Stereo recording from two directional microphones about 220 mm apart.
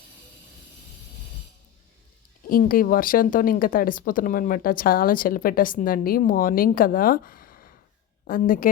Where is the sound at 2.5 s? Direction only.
40° left (ahead or behind).